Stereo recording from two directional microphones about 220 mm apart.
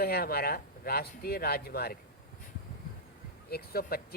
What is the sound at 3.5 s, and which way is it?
Speech, 45° left (ahead or behind).